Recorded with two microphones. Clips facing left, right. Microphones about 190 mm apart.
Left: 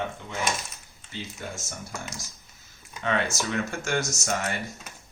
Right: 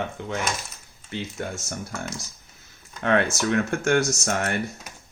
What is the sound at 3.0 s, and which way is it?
Mantra, 60° right (ahead or behind).